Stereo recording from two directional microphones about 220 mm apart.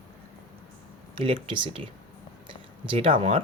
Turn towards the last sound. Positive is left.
turn(degrees=-25)  # may be behind; listen again after turning